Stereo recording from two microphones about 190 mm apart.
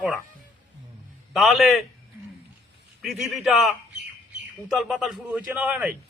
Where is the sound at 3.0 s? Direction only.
Centre (ahead or behind).